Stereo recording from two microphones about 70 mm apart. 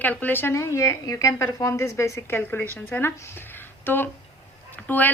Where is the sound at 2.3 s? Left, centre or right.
Left.